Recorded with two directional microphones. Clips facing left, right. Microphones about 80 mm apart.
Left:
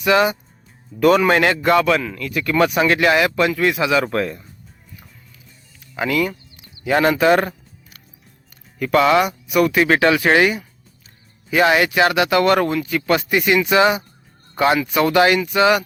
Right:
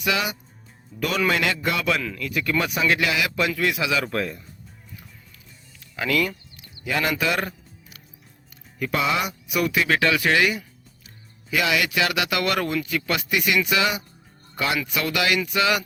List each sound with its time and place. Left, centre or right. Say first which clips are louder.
0.0 s speech: left 9 dB; left
6.0 s a sound: left 4 dB; left
6.8 s speech: left 9 dB; left
8.8 s speech: left 9 dB; left